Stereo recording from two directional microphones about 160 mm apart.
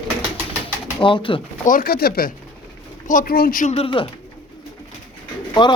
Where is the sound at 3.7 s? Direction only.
35° left (ahead or behind).